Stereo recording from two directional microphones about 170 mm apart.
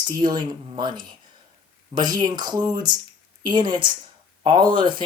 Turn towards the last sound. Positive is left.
turn(degrees=-25)  # may be behind; listen again after turning